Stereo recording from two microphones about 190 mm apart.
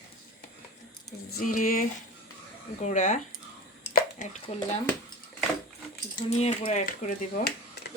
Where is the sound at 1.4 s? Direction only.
45° left (ahead or behind).